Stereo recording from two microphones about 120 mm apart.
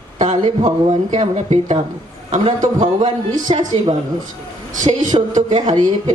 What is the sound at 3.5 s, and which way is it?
Speech, 55° right (ahead or behind).